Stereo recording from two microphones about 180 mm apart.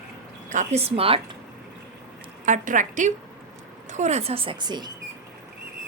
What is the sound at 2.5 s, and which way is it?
A woman's voice, 45° right (ahead or behind).